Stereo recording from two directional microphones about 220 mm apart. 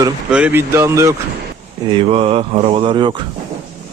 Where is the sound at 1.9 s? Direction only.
25° right (ahead or behind).